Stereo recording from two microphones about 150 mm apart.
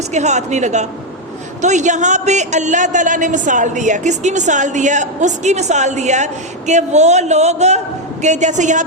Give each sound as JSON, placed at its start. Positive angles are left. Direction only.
{"t": 0.1, "sound": "a man's voice", "side_deg": -50}